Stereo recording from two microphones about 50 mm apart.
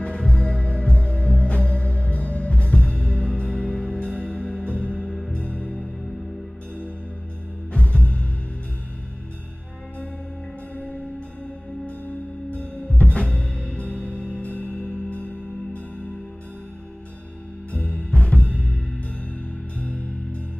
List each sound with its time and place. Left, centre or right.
0.0 s music: left
7.7 s music: left
12.5 s music: left
14.5 s music: left
17.6 s music: left
19.8 s music: left